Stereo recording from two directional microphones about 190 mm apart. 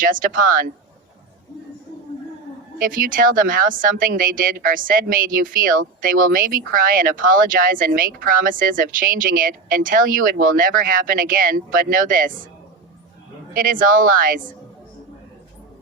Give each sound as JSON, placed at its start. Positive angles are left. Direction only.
{"t": 0.0, "sound": "speech", "side_deg": -45}
{"t": 2.7, "sound": "speech", "side_deg": -50}
{"t": 13.5, "sound": "speech", "side_deg": -50}